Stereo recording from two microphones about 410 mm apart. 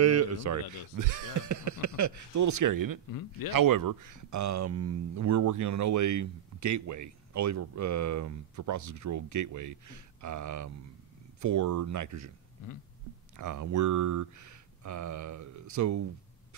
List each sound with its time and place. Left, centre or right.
0.0 s speech: right
3.1 s a man's voice: left
3.4 s speech: right
13.4 s speech: right